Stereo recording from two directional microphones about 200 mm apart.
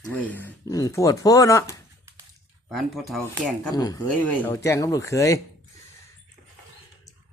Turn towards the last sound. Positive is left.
turn(degrees=15)  # may be behind; listen again after turning